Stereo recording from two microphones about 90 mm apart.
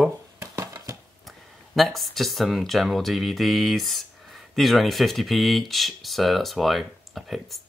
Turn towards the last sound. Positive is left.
turn(degrees=0)  # may be behind; listen again after turning